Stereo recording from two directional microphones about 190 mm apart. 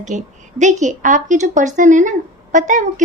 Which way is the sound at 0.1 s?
40° right (ahead or behind).